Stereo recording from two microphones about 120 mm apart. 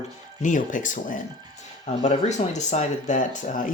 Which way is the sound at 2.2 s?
75° left (ahead or behind).